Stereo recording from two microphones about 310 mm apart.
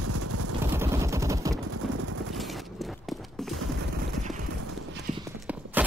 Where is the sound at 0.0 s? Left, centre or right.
Right.